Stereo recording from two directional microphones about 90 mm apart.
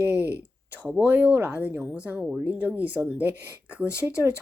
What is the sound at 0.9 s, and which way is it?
Speech, 20° right (ahead or behind).